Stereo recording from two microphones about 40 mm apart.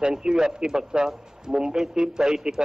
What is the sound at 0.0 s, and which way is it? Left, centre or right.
A man's voice, centre.